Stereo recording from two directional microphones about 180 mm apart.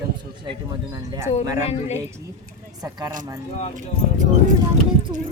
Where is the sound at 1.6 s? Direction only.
40° left (ahead or behind).